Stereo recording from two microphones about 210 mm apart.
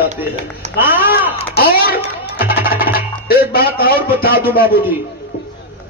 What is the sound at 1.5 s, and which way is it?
Speech, 50° left (ahead or behind).